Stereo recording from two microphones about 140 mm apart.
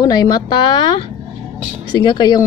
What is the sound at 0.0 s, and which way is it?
Speech, 30° left (ahead or behind).